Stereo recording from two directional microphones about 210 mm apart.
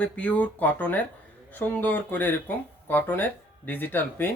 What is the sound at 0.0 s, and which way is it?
Speech, 5° left (ahead or behind).